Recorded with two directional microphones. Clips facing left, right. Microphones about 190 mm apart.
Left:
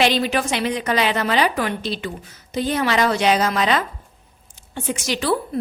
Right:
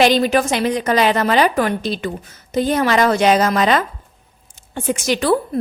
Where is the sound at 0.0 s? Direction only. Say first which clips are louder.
Right 5 dB; 45° right (ahead or behind).